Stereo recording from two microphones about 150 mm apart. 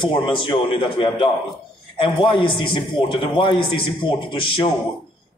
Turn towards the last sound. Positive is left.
turn(degrees=35)  # may be behind; listen again after turning